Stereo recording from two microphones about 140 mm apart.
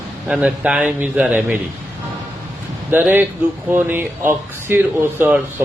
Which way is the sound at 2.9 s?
15° right (ahead or behind).